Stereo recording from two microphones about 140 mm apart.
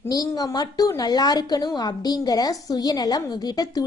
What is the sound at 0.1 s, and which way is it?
A woman's voice, 25° left (ahead or behind).